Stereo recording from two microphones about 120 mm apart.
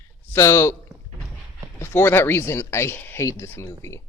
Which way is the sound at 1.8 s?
20° left (ahead or behind).